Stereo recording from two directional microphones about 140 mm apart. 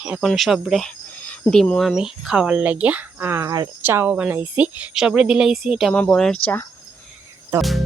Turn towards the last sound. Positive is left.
turn(degrees=0)  # may be behind; listen again after turning